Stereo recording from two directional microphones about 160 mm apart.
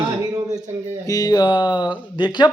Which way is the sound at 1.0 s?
25° left (ahead or behind).